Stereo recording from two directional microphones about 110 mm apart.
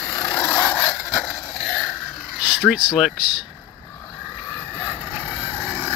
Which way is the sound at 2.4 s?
10° right (ahead or behind).